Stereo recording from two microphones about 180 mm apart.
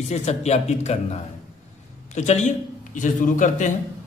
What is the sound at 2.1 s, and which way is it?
A man's voice, 40° left (ahead or behind).